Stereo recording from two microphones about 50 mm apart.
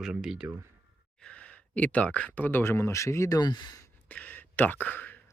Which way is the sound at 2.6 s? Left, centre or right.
Left.